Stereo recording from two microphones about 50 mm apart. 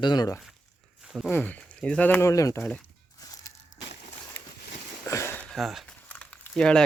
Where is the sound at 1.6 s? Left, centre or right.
Left.